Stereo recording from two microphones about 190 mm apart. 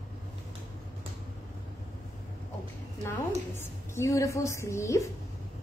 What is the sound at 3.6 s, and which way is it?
A woman's voice, 15° left (ahead or behind).